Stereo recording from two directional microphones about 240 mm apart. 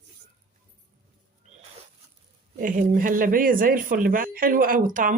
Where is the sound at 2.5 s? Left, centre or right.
Right.